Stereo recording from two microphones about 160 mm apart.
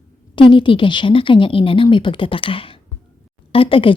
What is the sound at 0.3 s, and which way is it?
A woman's voice, 30° left (ahead or behind).